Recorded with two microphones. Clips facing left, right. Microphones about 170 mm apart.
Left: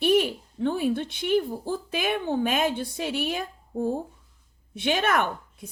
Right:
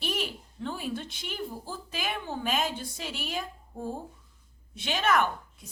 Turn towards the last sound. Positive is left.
turn(degrees=55)  # may be behind; listen again after turning